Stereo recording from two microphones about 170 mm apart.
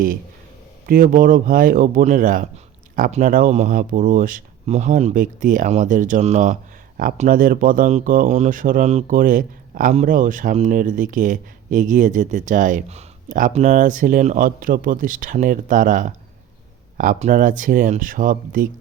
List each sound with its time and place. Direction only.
0.9 s speech: 55° right (ahead or behind)